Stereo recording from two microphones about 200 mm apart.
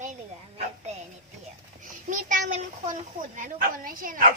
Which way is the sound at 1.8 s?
40° right (ahead or behind).